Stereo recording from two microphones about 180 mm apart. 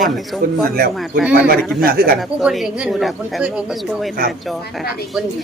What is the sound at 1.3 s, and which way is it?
Speech, 55° right (ahead or behind).